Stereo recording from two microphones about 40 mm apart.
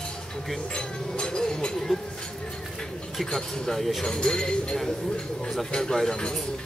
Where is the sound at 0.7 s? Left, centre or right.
Left.